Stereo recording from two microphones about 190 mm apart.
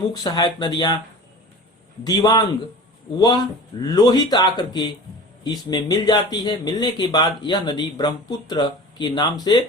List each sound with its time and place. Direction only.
0.1 s speech: 20° left (ahead or behind)
2.0 s speech: 20° left (ahead or behind)